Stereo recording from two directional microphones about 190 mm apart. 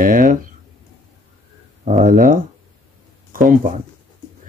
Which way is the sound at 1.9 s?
45° right (ahead or behind).